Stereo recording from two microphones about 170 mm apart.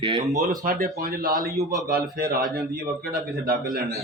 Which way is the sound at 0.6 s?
55° right (ahead or behind).